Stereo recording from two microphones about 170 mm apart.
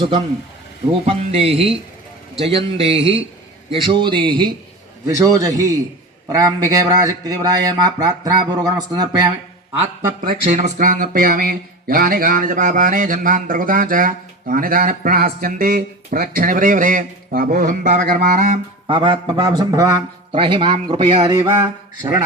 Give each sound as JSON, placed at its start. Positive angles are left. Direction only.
{"t": 1.0, "sound": "a man's voice", "side_deg": -35}
{"t": 10.2, "sound": "speech", "side_deg": -50}
{"t": 18.9, "sound": "speech", "side_deg": -30}